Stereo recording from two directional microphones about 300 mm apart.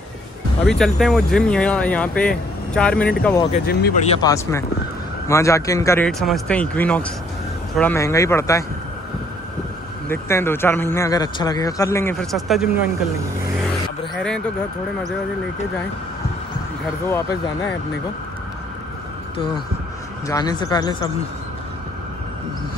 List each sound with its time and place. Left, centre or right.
0.7 s speech: centre
3.5 s speech: left
4.2 s a man's voice: centre
10.0 s a man's voice: centre
14.1 s speech: centre
20.2 s a man's voice: centre